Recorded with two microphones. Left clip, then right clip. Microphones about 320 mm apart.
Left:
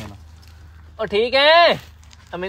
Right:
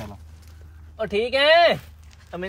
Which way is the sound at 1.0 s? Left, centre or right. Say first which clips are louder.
Left 4 dB; centre.